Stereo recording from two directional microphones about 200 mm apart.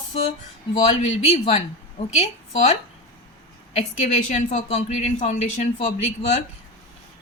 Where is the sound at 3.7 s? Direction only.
35° left (ahead or behind).